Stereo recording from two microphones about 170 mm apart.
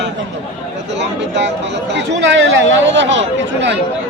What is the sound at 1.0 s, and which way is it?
Speech, 90° right.